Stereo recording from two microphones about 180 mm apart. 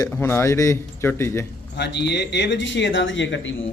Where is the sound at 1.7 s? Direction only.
70° left (ahead or behind); by 3.5 s 90° left.